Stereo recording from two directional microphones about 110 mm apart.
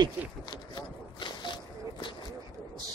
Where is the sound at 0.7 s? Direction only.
45° left (ahead or behind).